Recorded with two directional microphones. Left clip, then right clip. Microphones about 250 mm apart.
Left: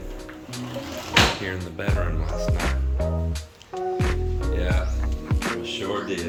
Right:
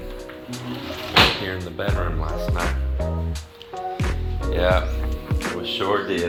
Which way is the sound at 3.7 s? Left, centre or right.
Centre.